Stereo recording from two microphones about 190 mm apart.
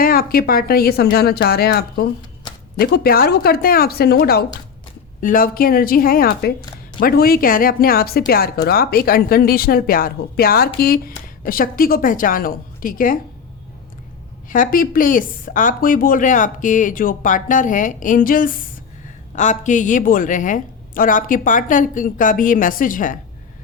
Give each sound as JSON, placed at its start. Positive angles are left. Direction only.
{"t": 0.0, "sound": "speech", "side_deg": 50}
{"t": 14.5, "sound": "speech", "side_deg": 45}